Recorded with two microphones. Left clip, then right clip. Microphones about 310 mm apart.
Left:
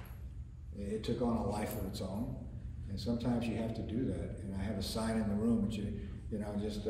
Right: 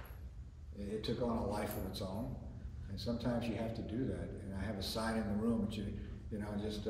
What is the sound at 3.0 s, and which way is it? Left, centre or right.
A man's voice, centre.